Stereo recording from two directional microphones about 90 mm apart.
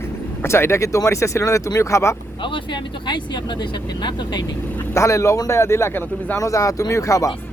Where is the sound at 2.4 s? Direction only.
65° left (ahead or behind).